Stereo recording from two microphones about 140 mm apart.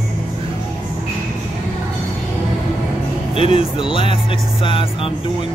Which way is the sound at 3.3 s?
40° left (ahead or behind).